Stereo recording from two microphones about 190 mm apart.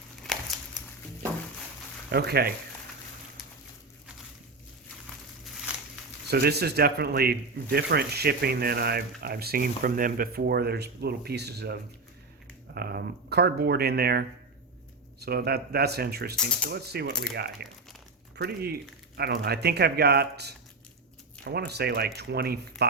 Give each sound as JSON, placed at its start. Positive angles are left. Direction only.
{"t": 0.3, "sound": "a sound", "side_deg": 0}
{"t": 2.0, "sound": "speech", "side_deg": -55}
{"t": 6.3, "sound": "speech", "side_deg": -55}